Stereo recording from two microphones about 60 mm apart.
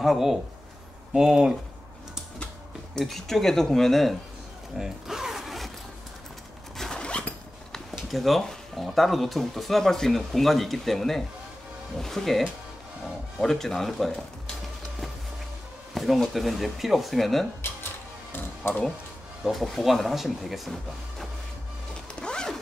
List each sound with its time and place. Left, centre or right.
0.0 s speech: centre
3.0 s speech: centre
4.7 s zipper: centre
6.8 s zipper: centre
7.9 s speech: centre
15.9 s a sound: centre
16.3 s speech: centre
19.4 s speech: centre
22.2 s music: centre